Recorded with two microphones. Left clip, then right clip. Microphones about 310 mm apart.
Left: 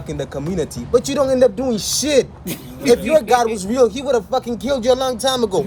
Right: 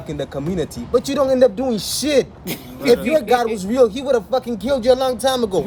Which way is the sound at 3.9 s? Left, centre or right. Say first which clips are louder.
Even; centre.